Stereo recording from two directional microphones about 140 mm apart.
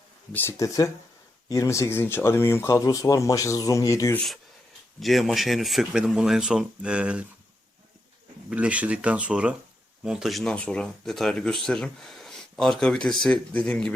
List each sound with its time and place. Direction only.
0.3 s speech: 20° left (ahead or behind)
4.9 s speech: centre (ahead or behind)
8.4 s speech: 10° right (ahead or behind)